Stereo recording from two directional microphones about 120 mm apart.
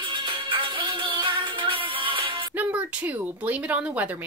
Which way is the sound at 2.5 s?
10° right (ahead or behind).